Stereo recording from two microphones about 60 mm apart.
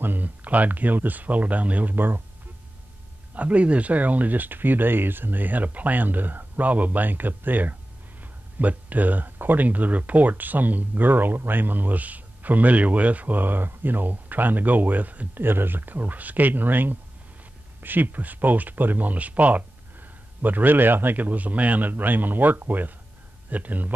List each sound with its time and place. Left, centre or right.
0.0 s speech: right
3.3 s a man's voice: right